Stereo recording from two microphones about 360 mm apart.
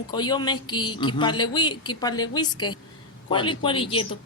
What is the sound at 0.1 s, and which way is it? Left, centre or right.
A woman's voice, centre.